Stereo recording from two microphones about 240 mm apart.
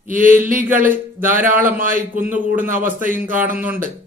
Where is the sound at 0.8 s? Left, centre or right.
Centre.